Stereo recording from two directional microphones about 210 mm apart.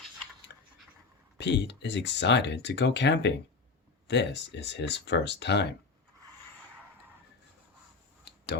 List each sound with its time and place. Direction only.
1.4 s speech: 55° left (ahead or behind)